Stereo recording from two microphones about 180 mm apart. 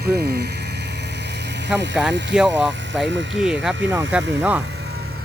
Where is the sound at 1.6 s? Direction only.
75° right (ahead or behind).